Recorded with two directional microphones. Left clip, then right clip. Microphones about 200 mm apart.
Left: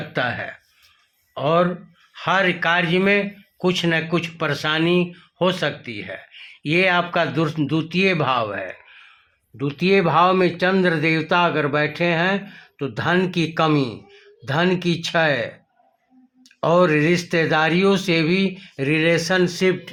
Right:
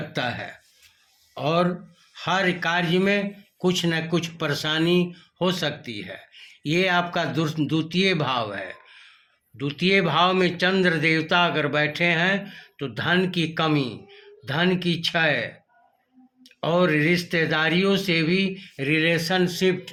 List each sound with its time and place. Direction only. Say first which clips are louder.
0.1 s speech: left 6 dB; 25° left (ahead or behind)
9.6 s speech: left 3 dB; 50° left (ahead or behind)
16.6 s speech: left 5 dB; 50° left (ahead or behind)